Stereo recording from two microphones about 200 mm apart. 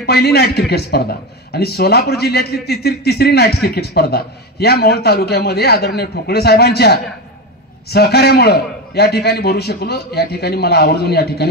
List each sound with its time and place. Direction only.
0.0 s a man's voice: 55° left (ahead or behind)